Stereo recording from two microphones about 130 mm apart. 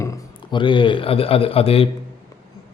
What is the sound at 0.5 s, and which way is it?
A man's voice, 40° left (ahead or behind).